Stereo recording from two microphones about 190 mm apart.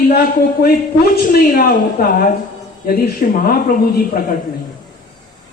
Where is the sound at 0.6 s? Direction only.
45° left (ahead or behind).